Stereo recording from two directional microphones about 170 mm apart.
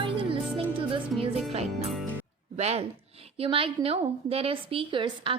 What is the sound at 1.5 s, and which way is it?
A woman's voice, 40° right (ahead or behind).